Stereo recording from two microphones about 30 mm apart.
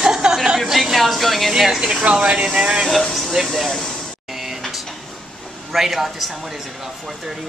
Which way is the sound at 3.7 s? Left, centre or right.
Centre.